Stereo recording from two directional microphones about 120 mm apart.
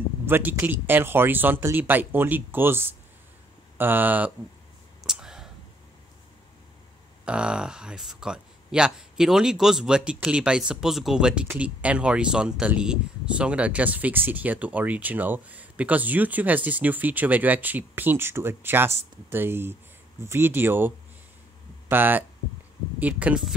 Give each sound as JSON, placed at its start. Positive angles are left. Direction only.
{"t": 0.3, "sound": "speech", "side_deg": -15}
{"t": 5.0, "sound": "whispering", "side_deg": -5}
{"t": 7.2, "sound": "speech", "side_deg": -10}
{"t": 21.8, "sound": "hum", "side_deg": -15}
{"t": 22.9, "sound": "speech", "side_deg": -10}